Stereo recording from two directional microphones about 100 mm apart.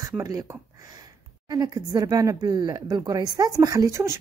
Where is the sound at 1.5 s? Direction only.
40° right (ahead or behind).